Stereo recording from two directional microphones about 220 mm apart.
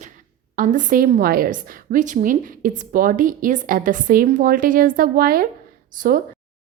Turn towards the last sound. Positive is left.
turn(degrees=-40)  # may be behind; listen again after turning